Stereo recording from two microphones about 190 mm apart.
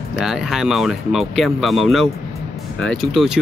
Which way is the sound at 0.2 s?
Centre (ahead or behind).